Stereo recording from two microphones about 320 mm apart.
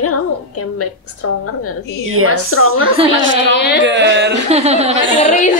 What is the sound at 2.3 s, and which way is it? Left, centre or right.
Speech, left.